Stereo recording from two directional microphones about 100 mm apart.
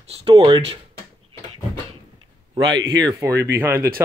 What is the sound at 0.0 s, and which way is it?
Speech, 75° right (ahead or behind).